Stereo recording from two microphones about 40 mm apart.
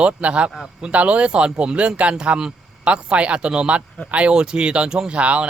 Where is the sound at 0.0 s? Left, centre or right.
Right.